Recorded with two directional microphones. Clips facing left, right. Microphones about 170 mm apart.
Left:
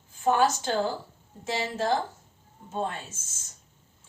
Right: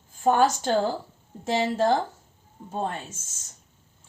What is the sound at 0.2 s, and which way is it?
Speech, 40° right (ahead or behind).